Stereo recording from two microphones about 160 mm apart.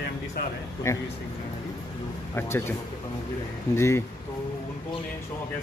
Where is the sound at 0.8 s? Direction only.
20° left (ahead or behind).